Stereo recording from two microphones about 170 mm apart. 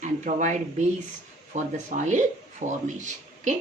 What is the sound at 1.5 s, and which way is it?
Speech, 45° right (ahead or behind).